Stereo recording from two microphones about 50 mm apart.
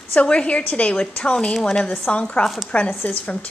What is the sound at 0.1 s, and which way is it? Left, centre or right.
A woman's voice, left.